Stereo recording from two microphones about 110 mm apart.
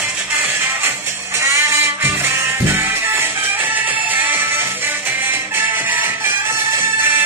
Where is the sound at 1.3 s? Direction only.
25° right (ahead or behind).